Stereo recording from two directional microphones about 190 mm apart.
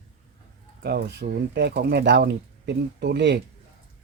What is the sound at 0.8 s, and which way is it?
Speech, 60° right (ahead or behind).